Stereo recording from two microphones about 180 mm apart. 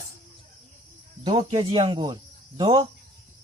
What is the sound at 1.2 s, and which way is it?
Speech, 25° right (ahead or behind).